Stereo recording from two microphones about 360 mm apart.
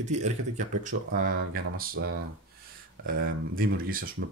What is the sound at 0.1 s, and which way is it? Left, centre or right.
Speech, centre.